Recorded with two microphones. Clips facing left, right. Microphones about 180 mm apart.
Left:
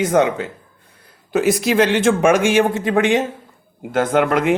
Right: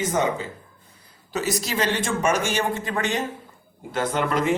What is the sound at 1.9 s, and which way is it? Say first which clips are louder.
Speech: left 8 dB; 90° left.